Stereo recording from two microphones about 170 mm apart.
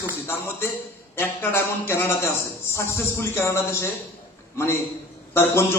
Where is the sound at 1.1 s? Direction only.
15° left (ahead or behind).